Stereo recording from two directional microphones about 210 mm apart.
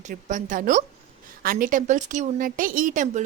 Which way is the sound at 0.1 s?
35° right (ahead or behind).